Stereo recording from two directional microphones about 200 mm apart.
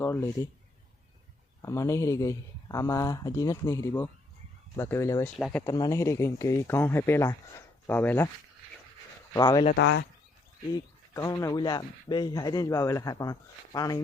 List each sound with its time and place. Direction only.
0.0 s a sound: 10° left (ahead or behind)
1.6 s speech: 15° left (ahead or behind)
5.4 s speech: centre (ahead or behind)
5.6 s speech: 20° left (ahead or behind)
9.3 s speech: 20° left (ahead or behind)
9.7 s speech: 65° left (ahead or behind)
10.7 s speech: 15° left (ahead or behind)